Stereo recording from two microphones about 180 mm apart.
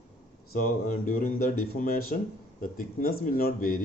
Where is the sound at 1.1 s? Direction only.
55° left (ahead or behind).